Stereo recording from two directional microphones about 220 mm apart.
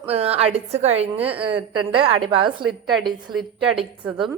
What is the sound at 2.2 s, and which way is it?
Speech, 25° right (ahead or behind).